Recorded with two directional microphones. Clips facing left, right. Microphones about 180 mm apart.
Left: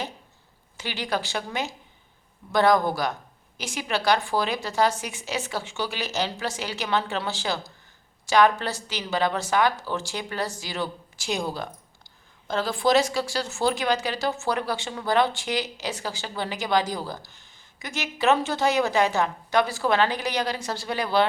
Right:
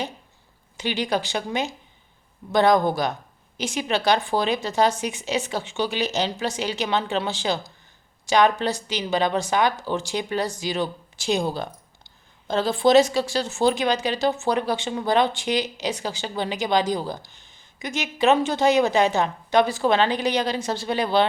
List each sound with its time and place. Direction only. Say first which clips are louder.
0.8 s a woman's voice: right 4 dB; 20° right (ahead or behind)